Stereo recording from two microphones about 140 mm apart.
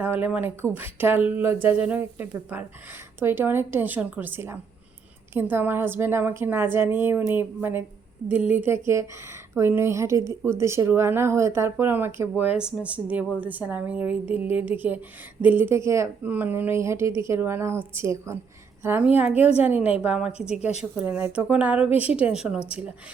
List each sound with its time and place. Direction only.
0.0 s a woman's voice: 15° right (ahead or behind)
20.6 s speech: 55° left (ahead or behind)
21.0 s a woman's voice: 15° right (ahead or behind)